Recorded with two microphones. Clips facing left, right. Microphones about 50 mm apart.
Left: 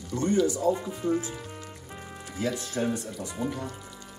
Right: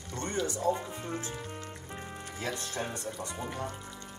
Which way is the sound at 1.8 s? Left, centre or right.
Centre.